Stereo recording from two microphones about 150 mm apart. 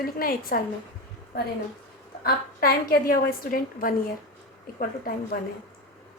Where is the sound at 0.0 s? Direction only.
80° left.